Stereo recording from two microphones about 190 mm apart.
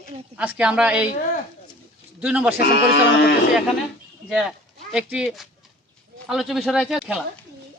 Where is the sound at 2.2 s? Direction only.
10° right (ahead or behind).